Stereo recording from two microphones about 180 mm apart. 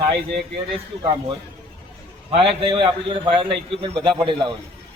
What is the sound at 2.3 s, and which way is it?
A man's voice, 30° right (ahead or behind).